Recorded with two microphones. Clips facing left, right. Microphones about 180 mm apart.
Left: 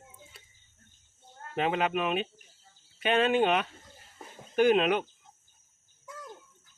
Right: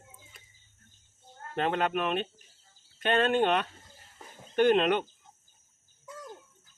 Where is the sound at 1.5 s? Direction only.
5° left (ahead or behind).